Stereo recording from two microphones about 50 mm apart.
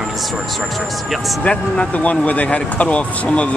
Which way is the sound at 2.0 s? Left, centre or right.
Left.